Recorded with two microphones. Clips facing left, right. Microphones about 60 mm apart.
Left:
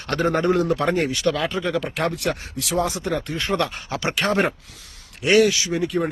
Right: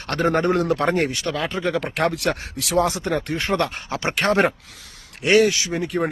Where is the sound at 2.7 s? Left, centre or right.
Right.